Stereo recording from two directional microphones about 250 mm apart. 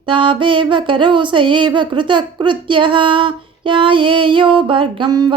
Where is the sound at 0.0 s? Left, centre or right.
Centre.